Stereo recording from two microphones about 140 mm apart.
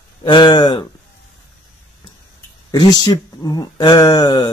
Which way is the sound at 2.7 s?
30° left (ahead or behind).